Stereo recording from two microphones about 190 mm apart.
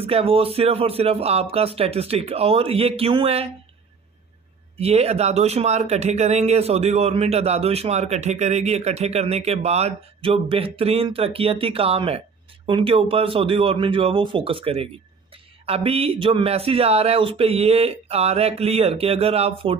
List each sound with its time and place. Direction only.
0.0 s speech: 30° right (ahead or behind)
4.7 s a man's voice: 35° right (ahead or behind)